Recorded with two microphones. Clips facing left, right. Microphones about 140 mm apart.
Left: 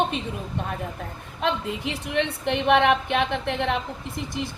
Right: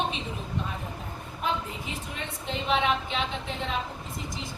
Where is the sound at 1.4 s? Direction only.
80° left.